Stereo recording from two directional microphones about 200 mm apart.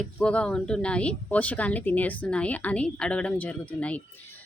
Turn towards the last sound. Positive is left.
turn(degrees=5)  # may be behind; listen again after turning